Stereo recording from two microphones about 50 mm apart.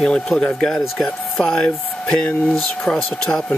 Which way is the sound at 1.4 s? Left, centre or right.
Centre.